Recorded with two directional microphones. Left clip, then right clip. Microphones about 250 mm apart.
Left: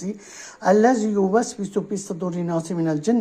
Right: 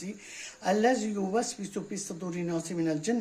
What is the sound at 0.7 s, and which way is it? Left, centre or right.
Speech, centre.